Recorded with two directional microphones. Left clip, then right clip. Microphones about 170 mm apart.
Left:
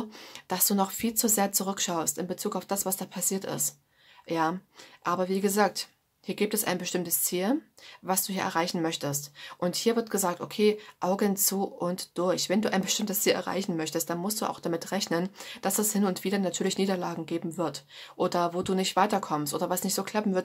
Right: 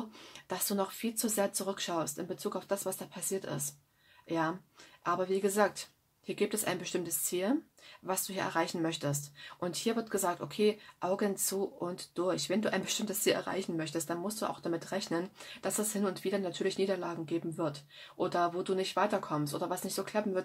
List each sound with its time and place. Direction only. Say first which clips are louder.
0.5 s speech: left 6 dB; 35° left (ahead or behind)